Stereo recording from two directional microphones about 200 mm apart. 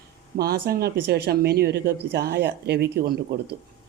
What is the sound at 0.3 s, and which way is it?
Speech, 50° right (ahead or behind).